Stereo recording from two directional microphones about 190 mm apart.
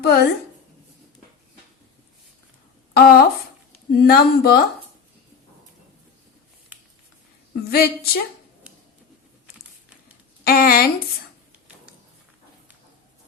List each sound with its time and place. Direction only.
0.0 s speech: 55° left (ahead or behind)
2.9 s speech: 55° left (ahead or behind)
7.5 s speech: 55° left (ahead or behind)
10.4 s speech: 50° left (ahead or behind)